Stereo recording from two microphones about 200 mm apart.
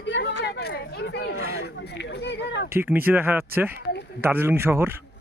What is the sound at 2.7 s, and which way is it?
Speech, 10° right (ahead or behind).